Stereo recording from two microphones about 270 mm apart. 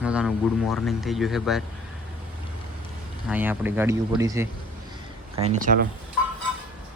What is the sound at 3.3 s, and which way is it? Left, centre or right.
A man's voice, centre.